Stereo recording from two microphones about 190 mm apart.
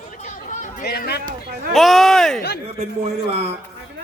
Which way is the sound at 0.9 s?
55° left (ahead or behind).